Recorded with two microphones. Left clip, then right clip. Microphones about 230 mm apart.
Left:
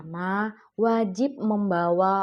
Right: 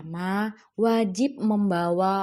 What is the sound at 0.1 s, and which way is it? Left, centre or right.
A woman's voice, right.